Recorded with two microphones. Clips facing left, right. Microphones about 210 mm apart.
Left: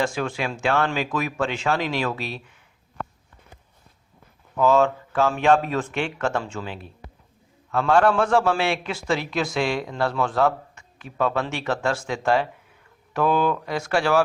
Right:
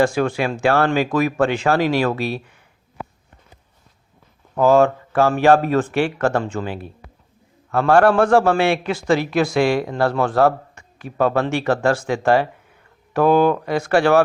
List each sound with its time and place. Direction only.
0.0 s speech: 60° right (ahead or behind)
4.5 s speech: 45° right (ahead or behind)